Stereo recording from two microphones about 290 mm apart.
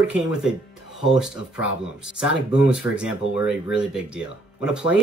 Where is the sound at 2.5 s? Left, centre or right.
Centre.